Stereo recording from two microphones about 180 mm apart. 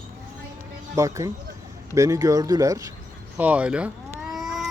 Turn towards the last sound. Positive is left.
turn(degrees=0)  # may be behind; listen again after turning